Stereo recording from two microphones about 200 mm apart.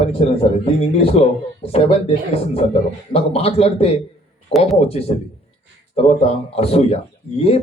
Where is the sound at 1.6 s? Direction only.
30° left (ahead or behind).